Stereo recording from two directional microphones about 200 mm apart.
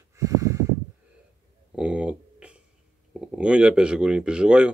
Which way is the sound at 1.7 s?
5° right (ahead or behind).